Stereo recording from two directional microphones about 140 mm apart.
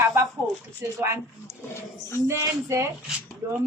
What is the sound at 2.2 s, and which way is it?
Speech, 20° right (ahead or behind).